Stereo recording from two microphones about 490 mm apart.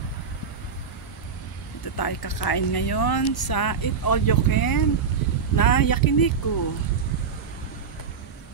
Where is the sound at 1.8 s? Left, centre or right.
Left.